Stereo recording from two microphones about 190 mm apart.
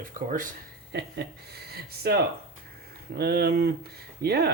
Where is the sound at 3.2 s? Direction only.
55° right (ahead or behind).